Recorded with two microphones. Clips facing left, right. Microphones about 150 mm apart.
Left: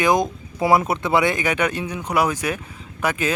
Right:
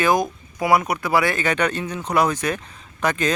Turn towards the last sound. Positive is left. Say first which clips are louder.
# right 1 dB
turn(degrees=10)  # may be behind; listen again after turning